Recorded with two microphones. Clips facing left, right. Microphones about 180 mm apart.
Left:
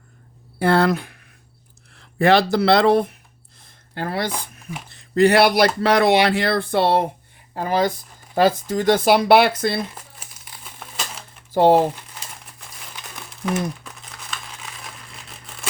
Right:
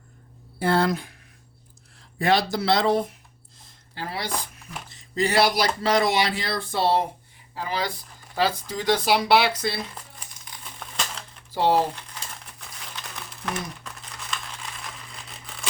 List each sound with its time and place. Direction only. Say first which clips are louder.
0.6 s speech: left 5 dB; 65° left (ahead or behind)
7.5 s speech: left 8 dB; 50° left (ahead or behind)
9.9 s crumpling: left 1 dB; 5° left (ahead or behind)
11.5 s speech: left 7 dB; 50° left (ahead or behind)
12.5 s crumpling: even; 5° left (ahead or behind)